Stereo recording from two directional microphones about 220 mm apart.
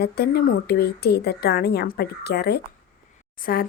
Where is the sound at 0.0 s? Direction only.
45° left (ahead or behind).